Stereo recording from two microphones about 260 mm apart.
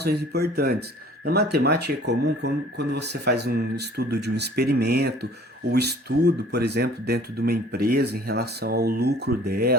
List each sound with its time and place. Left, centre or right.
0.0 s speech: right